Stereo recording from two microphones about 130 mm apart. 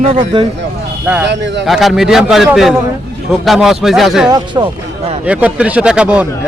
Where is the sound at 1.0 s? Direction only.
10° right (ahead or behind).